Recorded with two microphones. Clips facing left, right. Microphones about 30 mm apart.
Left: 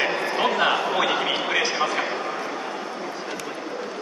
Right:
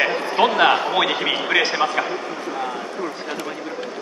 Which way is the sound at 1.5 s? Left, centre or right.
Right.